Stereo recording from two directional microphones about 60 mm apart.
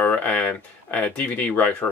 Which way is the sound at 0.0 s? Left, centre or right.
Left.